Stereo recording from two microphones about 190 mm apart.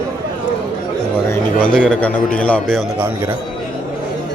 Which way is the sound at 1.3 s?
5° left (ahead or behind).